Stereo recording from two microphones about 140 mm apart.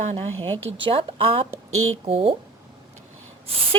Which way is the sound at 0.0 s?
50° right (ahead or behind).